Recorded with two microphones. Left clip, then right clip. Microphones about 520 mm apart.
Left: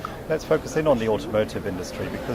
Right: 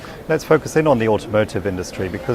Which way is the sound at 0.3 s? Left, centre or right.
Right.